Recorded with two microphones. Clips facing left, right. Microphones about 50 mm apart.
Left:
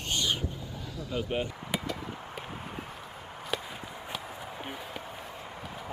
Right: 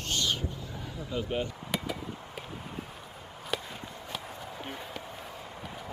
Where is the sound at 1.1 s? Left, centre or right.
Centre.